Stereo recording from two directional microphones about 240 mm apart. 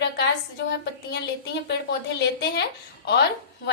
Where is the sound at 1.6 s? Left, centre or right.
Left.